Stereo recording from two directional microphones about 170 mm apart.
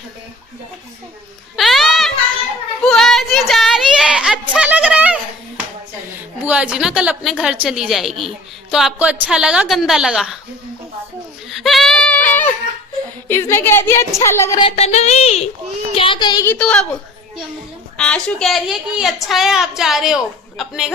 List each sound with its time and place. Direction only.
1.5 s a sound: centre (ahead or behind)
6.1 s a woman's voice: 10° right (ahead or behind)
11.5 s a sound: centre (ahead or behind)
13.2 s a woman's voice: 15° left (ahead or behind)
14.6 s a woman's voice: 40° left (ahead or behind)
16.5 s a woman's voice: 5° left (ahead or behind)
17.9 s a woman's voice: 5° left (ahead or behind)